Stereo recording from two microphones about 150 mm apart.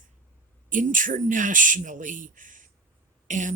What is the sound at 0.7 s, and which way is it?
Speech, 60° right (ahead or behind).